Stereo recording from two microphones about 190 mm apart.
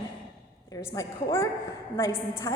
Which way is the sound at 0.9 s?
15° left (ahead or behind).